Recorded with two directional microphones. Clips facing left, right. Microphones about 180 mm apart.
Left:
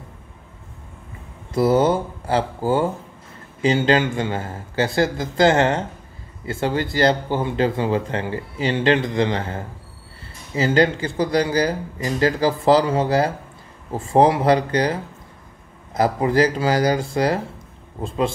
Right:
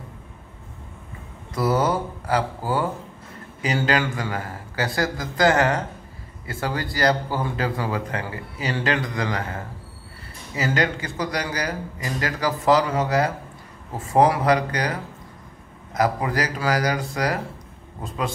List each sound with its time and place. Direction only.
1.5 s speech: 25° left (ahead or behind)